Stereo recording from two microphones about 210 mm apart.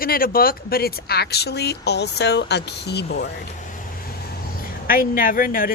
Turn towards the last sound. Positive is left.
turn(degrees=40)  # may be behind; listen again after turning